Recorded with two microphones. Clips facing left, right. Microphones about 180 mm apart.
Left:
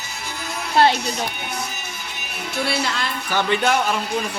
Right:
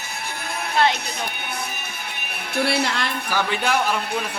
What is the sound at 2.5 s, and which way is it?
Speech, 60° right (ahead or behind).